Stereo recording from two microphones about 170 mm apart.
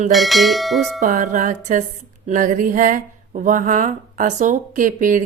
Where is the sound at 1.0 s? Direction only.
50° right (ahead or behind).